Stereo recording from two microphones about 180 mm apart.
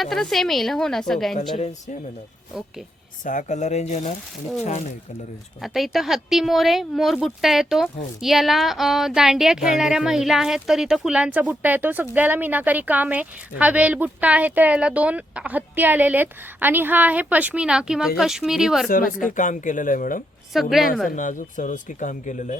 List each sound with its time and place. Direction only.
0.0 s speech: centre (ahead or behind)
3.2 s speech: 45° left (ahead or behind)
5.6 s speech: centre (ahead or behind)
18.9 s speech: 50° left (ahead or behind)
20.5 s speech: centre (ahead or behind)
21.2 s speech: 45° left (ahead or behind)